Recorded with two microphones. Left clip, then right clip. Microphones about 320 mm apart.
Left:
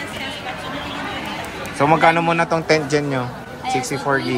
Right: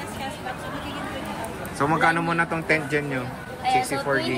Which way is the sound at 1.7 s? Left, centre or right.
Centre.